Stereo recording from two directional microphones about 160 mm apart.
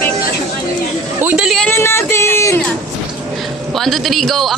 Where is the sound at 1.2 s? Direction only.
5° right (ahead or behind).